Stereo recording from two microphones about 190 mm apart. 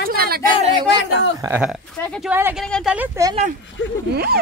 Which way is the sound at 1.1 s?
5° right (ahead or behind).